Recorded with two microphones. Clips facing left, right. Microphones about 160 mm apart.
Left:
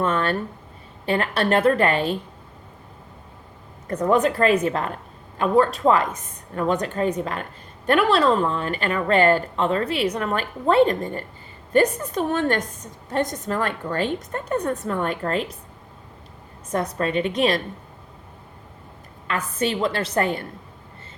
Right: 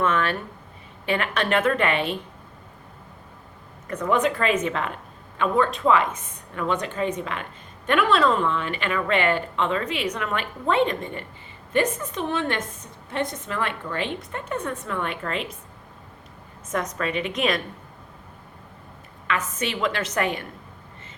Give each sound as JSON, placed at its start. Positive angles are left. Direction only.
{"t": 0.0, "sound": "a woman's voice", "side_deg": 35}
{"t": 3.8, "sound": "a woman's voice", "side_deg": 40}
{"t": 16.7, "sound": "a woman's voice", "side_deg": 35}
{"t": 19.3, "sound": "a woman's voice", "side_deg": 35}